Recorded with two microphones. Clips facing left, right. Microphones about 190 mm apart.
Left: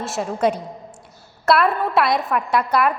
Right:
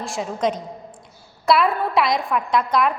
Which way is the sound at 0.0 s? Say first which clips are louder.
Left 3 dB; 5° left (ahead or behind).